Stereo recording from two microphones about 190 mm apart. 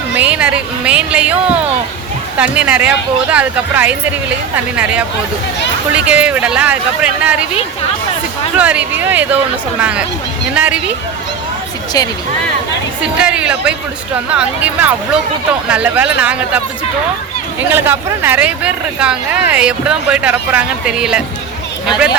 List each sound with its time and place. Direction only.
0.2 s speech: 5° right (ahead or behind)
6.1 s speech: 5° right (ahead or behind)
8.5 s speech: 5° right (ahead or behind)
10.5 s speech: 5° right (ahead or behind)
11.9 s speech: 20° left (ahead or behind)
13.0 s speech: 5° right (ahead or behind)
17.6 s speech: 10° right (ahead or behind)